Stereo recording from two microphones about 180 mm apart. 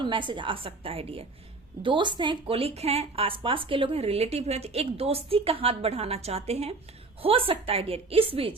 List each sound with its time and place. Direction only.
0.0 s a woman's voice: 25° right (ahead or behind)